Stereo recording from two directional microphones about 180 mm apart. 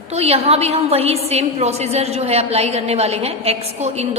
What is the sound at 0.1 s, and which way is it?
A woman's voice, 35° right (ahead or behind).